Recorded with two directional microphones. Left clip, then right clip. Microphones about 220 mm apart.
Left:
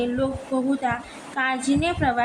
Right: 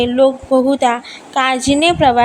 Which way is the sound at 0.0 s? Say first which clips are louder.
Right 13 dB; 40° right (ahead or behind).